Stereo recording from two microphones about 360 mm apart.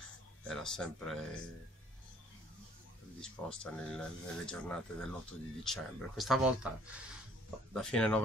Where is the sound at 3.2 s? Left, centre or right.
Centre.